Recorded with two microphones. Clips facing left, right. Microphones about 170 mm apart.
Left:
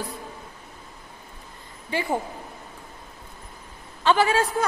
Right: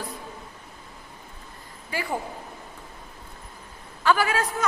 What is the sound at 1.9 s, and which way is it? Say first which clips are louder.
Speech: left 4 dB; 25° left (ahead or behind).